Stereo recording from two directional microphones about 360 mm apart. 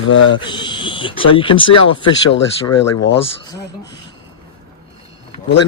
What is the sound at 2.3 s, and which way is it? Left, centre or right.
Speech, left.